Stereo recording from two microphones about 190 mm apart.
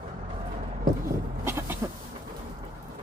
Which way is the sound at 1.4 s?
10° right (ahead or behind).